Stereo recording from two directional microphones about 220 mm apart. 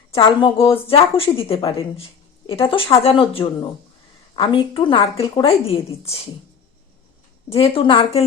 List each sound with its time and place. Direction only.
0.1 s a woman's voice: 25° left (ahead or behind)
7.5 s a woman's voice: 25° left (ahead or behind)